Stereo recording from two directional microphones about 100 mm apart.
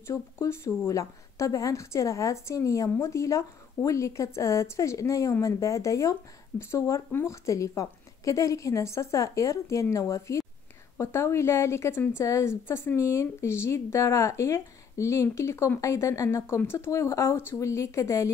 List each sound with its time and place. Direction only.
0.0 s speech: 30° left (ahead or behind)